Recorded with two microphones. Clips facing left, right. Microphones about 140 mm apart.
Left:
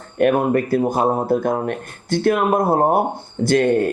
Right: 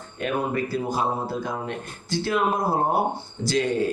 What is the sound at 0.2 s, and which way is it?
Speech, 55° left (ahead or behind).